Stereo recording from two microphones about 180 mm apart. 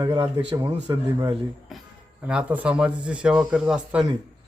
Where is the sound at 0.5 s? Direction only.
25° right (ahead or behind).